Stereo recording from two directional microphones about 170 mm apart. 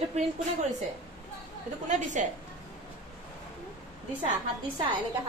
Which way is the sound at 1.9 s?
45° right (ahead or behind).